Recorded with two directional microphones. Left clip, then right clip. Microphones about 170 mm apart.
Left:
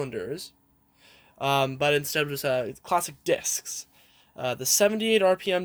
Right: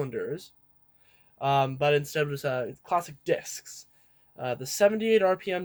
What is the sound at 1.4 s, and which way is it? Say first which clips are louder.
Speech: left 1 dB; 45° left (ahead or behind).